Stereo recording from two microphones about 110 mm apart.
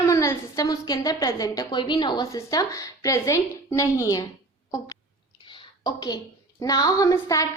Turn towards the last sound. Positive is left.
turn(degrees=30)  # may be behind; listen again after turning